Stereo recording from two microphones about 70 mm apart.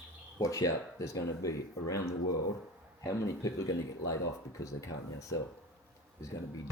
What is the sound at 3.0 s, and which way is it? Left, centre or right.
Speech, left.